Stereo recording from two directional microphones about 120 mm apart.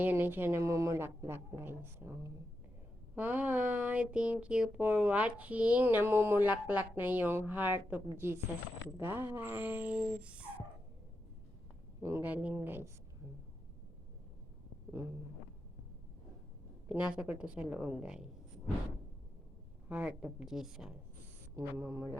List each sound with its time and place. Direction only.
0.0 s speech: 15° right (ahead or behind)
11.9 s speech: 20° right (ahead or behind)
16.9 s speech: 10° right (ahead or behind)
19.9 s a woman's voice: 10° right (ahead or behind)
21.5 s speech: 20° right (ahead or behind)